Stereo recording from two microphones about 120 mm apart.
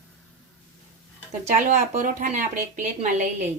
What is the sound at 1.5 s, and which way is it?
Speech, 90° right.